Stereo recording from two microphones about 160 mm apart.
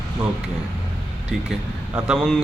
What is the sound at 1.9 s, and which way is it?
Speech, 5° right (ahead or behind).